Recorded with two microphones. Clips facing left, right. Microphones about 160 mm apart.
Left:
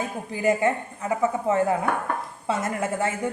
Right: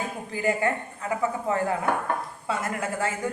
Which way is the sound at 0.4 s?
20° left (ahead or behind).